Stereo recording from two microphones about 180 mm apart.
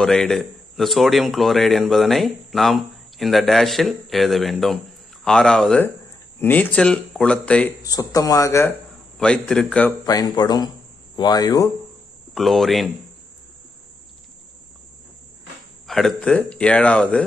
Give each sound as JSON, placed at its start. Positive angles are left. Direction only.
{"t": 0.0, "sound": "a man's voice", "side_deg": 5}
{"t": 7.8, "sound": "speech", "side_deg": 20}
{"t": 9.2, "sound": "a man's voice", "side_deg": 5}
{"t": 10.0, "sound": "speech", "side_deg": 20}
{"t": 12.4, "sound": "a man's voice", "side_deg": 0}
{"t": 15.9, "sound": "a man's voice", "side_deg": 0}